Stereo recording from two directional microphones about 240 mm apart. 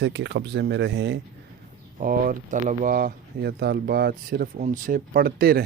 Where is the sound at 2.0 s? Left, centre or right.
Right.